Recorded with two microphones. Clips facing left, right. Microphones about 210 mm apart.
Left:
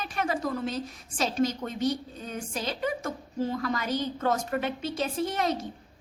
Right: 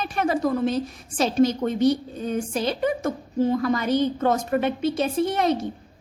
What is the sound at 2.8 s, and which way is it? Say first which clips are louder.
Speech: right 7 dB; 25° right (ahead or behind).